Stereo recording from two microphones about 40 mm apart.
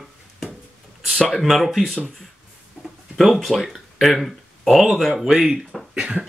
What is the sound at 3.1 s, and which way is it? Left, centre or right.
Speech, centre.